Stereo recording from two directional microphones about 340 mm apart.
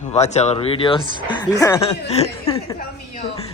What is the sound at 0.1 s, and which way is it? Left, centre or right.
Speech, centre.